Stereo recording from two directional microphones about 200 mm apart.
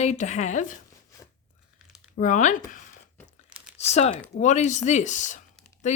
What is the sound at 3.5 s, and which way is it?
Crumpling, 5° right (ahead or behind).